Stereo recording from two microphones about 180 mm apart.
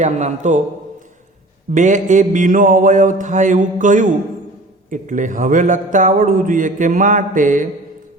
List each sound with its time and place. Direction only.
0.0 s a man's voice: 40° right (ahead or behind)
1.7 s a man's voice: 45° right (ahead or behind)